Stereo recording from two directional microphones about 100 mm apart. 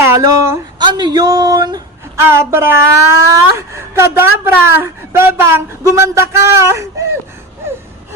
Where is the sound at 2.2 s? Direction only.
25° right (ahead or behind).